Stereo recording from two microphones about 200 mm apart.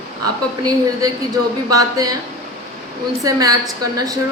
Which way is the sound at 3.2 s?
15° right (ahead or behind).